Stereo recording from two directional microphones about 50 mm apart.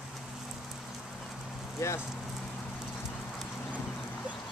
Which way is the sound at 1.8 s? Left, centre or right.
Left.